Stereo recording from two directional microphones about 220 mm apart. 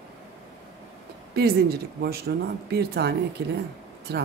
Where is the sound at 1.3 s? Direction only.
45° right (ahead or behind).